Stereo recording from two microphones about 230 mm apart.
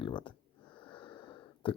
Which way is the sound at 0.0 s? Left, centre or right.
Left.